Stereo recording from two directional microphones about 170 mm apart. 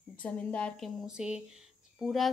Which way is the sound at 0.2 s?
10° left (ahead or behind).